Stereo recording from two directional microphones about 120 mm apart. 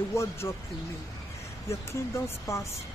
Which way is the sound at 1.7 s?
20° left (ahead or behind).